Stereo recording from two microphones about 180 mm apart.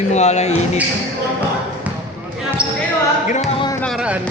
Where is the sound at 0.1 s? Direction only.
40° left (ahead or behind).